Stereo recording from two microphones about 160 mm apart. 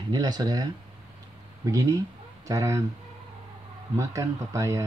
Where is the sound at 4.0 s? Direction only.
20° right (ahead or behind).